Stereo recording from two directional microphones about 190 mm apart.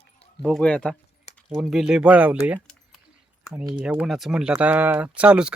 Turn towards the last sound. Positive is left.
turn(degrees=-5)  # may be behind; listen again after turning